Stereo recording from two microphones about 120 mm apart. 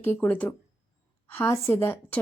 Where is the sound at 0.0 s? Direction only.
15° left (ahead or behind).